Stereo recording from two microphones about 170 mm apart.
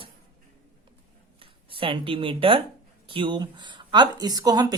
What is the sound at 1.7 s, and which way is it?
Speech, 30° right (ahead or behind).